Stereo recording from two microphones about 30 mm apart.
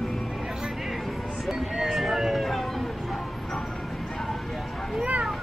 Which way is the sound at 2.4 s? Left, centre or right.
Centre.